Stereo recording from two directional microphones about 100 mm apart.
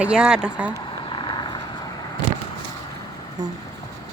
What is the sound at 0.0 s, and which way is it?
Speech, 10° right (ahead or behind).